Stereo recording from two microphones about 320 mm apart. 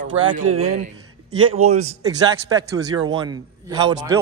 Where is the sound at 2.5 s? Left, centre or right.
Centre.